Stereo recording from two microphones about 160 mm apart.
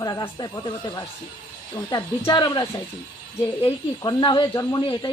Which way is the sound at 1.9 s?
25° left (ahead or behind).